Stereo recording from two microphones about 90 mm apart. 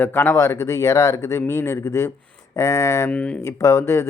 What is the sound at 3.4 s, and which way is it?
Speech, 35° left (ahead or behind).